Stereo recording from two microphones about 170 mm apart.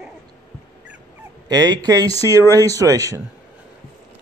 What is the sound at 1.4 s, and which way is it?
Speech, 25° right (ahead or behind).